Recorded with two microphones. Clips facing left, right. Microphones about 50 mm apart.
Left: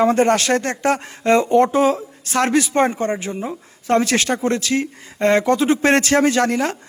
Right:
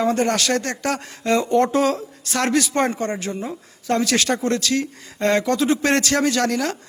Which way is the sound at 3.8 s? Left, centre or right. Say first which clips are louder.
Left 3 dB; left.